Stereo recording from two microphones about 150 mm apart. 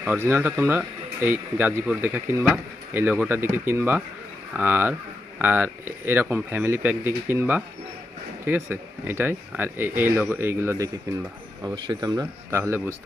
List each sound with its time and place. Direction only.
0.0 s speech: 10° right (ahead or behind)
11.6 s speech: 30° right (ahead or behind)